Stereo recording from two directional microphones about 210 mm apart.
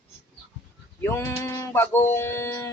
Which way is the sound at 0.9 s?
10° left (ahead or behind).